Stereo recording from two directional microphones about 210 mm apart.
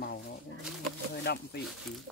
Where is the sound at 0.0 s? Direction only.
50° left (ahead or behind).